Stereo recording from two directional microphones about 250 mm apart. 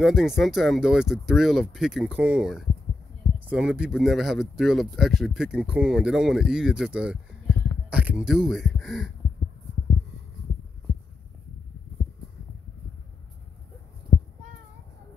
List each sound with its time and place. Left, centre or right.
0.0 s speech: centre